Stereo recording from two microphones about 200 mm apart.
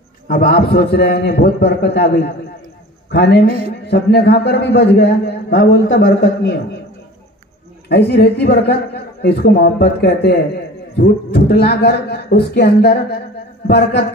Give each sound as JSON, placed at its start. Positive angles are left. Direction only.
{"t": 0.5, "sound": "a man's voice", "side_deg": 50}
{"t": 7.9, "sound": "a man's voice", "side_deg": 55}